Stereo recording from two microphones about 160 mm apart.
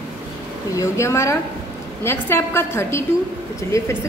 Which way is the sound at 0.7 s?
20° left (ahead or behind).